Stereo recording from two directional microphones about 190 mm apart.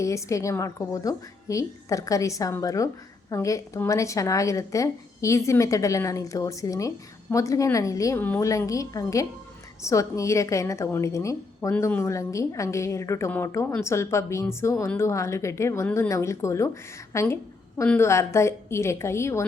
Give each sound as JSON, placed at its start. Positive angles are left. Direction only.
{"t": 0.0, "sound": "a woman's voice", "side_deg": 15}